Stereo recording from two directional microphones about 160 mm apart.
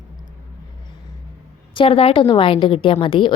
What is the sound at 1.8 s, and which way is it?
A woman's voice, 35° left (ahead or behind).